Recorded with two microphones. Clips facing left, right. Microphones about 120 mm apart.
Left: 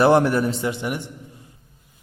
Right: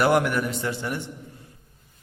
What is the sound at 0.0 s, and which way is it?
Speech, 30° left (ahead or behind).